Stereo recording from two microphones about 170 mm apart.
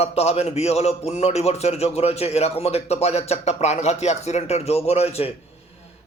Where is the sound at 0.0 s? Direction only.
35° left (ahead or behind).